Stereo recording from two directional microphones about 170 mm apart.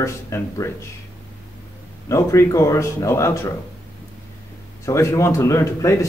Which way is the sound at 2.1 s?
15° left (ahead or behind).